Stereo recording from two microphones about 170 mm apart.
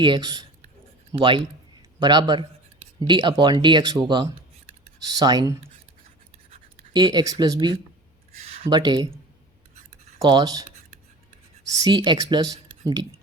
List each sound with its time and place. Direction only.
0.0 s speech: 30° right (ahead or behind)
6.9 s speech: 25° right (ahead or behind)
10.2 s speech: 25° right (ahead or behind)
11.7 s speech: 25° right (ahead or behind)